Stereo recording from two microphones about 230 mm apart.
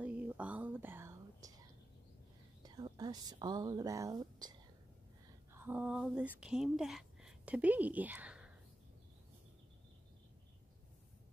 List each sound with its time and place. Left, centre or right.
0.0 s whispering: centre
2.6 s speech: centre